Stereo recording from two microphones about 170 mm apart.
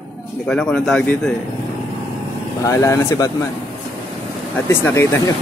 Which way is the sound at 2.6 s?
20° left (ahead or behind).